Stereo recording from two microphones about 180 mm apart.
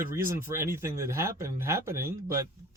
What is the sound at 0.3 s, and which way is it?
Speech, 15° right (ahead or behind).